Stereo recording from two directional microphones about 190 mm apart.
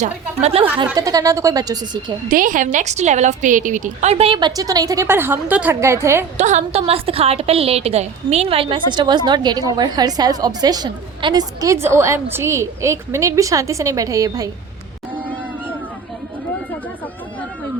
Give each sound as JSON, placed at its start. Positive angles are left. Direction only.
{"t": 0.0, "sound": "a woman's voice", "side_deg": -35}
{"t": 0.9, "sound": "a woman's voice", "side_deg": -20}
{"t": 2.3, "sound": "a woman's voice", "side_deg": -45}
{"t": 6.3, "sound": "a woman's voice", "side_deg": -40}